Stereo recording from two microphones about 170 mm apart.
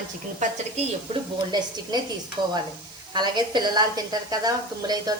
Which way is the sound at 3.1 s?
25° right (ahead or behind).